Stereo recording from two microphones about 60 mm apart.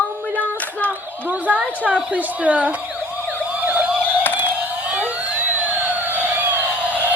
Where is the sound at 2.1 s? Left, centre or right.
Right.